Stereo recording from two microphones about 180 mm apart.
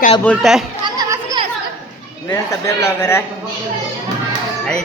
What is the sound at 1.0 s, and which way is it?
Children playing, 20° right (ahead or behind).